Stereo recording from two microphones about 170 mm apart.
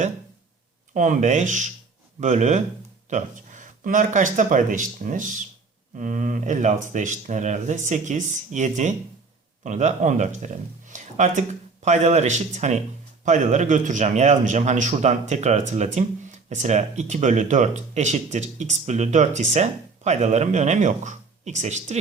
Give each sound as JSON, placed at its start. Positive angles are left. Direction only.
{"t": 0.9, "sound": "speech", "side_deg": -45}